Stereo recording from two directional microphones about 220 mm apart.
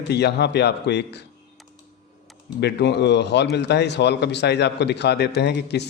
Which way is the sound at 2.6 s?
50° left (ahead or behind).